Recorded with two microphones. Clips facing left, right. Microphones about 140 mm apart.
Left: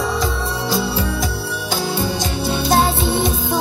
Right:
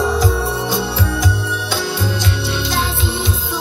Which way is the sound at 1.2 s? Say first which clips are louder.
Right 2 dB; 35° left (ahead or behind).